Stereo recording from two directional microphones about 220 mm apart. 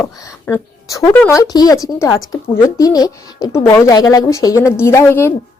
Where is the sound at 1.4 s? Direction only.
15° left (ahead or behind).